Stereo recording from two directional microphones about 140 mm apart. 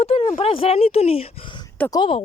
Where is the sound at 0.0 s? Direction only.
45° left (ahead or behind).